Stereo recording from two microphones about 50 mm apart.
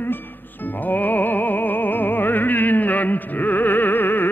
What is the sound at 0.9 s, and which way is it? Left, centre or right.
Opera, left.